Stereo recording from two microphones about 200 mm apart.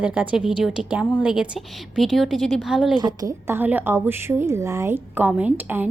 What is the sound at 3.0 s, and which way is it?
A woman's voice, 20° right (ahead or behind).